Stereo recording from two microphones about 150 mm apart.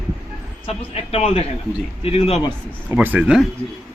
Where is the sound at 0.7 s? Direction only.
40° left (ahead or behind).